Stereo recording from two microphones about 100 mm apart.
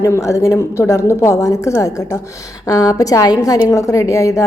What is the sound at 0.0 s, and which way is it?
A woman's voice, 30° left (ahead or behind).